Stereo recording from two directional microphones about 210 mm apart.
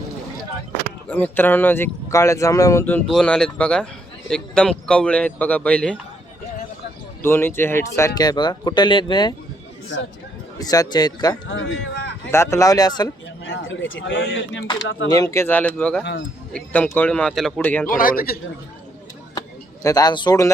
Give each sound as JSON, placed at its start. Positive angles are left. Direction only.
{"t": 1.0, "sound": "speech", "side_deg": 10}
{"t": 7.2, "sound": "speech", "side_deg": 10}
{"t": 10.6, "sound": "speech", "side_deg": 20}
{"t": 11.5, "sound": "speech", "side_deg": 65}
{"t": 12.3, "sound": "speech", "side_deg": 15}
{"t": 13.4, "sound": "speech", "side_deg": 70}
{"t": 15.1, "sound": "speech", "side_deg": 15}
{"t": 17.8, "sound": "speech", "side_deg": 40}
{"t": 19.8, "sound": "speech", "side_deg": 15}